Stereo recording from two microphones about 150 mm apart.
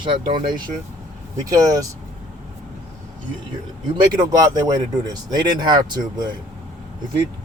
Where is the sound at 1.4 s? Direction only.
25° right (ahead or behind).